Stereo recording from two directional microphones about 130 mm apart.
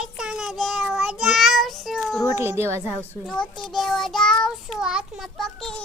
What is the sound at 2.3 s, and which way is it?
Speech, 20° right (ahead or behind).